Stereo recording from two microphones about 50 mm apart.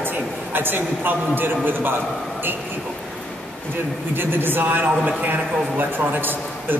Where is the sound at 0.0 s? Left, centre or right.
Right.